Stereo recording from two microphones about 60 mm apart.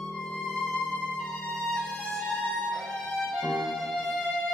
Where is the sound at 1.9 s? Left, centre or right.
Centre.